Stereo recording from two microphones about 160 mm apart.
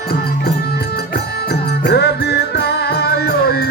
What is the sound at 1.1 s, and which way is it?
Music, 90° left.